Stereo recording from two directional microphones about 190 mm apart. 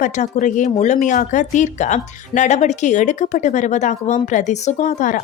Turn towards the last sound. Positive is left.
turn(degrees=40)  # may be behind; listen again after turning